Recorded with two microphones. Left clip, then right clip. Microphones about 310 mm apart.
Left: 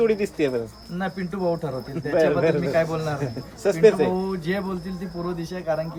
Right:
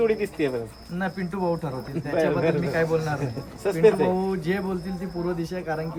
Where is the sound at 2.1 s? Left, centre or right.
Left.